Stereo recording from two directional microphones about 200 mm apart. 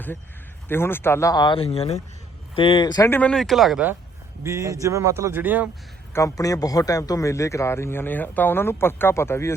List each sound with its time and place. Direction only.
0.7 s a man's voice: 10° left (ahead or behind)
4.4 s speech: 15° right (ahead or behind)
6.1 s a man's voice: 15° left (ahead or behind)